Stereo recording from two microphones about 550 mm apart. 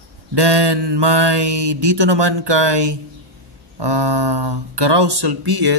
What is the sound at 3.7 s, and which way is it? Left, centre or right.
Speech, right.